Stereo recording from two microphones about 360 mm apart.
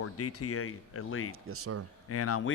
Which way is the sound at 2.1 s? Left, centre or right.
Left.